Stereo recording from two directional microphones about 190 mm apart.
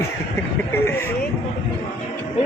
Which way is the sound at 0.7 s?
10° left (ahead or behind).